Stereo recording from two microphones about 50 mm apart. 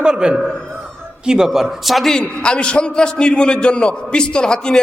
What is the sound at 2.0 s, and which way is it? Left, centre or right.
A man's voice, centre.